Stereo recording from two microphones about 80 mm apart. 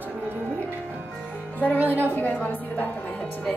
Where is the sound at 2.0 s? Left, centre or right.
Left.